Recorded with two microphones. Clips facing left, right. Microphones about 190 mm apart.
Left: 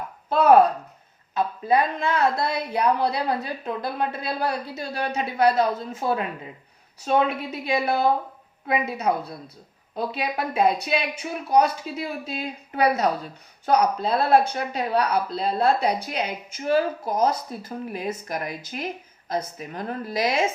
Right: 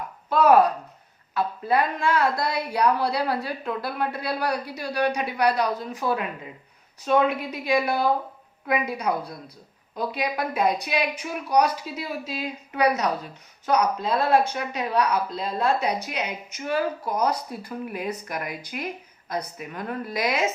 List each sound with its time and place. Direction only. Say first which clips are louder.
0.3 s a woman's voice: left 1 dB; 30° left (ahead or behind)